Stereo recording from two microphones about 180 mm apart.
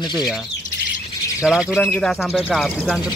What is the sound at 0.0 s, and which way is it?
Speech, 25° left (ahead or behind).